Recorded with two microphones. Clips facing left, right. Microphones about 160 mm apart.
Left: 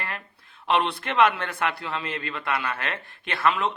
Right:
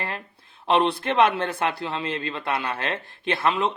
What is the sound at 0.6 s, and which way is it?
A man's voice, 30° right (ahead or behind).